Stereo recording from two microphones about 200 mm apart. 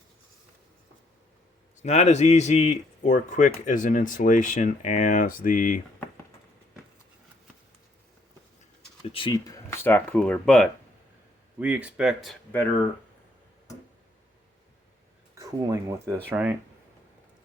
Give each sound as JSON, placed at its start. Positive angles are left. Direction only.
{"t": 1.8, "sound": "speech", "side_deg": 35}
{"t": 9.0, "sound": "speech", "side_deg": 25}
{"t": 9.6, "sound": "speech", "side_deg": 10}
{"t": 11.6, "sound": "speech", "side_deg": -5}
{"t": 15.4, "sound": "speech", "side_deg": -15}